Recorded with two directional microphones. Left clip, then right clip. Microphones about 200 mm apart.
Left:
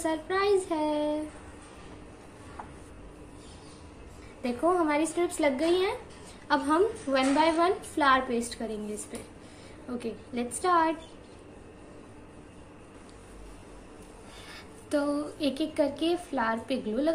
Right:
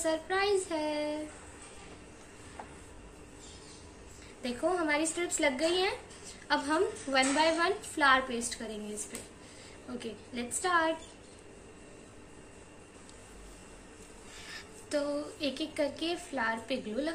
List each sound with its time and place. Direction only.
0.0 s a woman's voice: 10° left (ahead or behind)
4.4 s a woman's voice: 10° left (ahead or behind)
14.5 s a woman's voice: 10° left (ahead or behind)